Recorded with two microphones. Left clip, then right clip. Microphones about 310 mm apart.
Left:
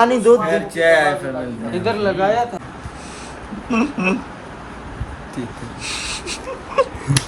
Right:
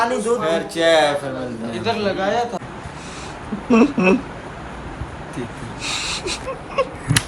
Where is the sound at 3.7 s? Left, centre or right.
Centre.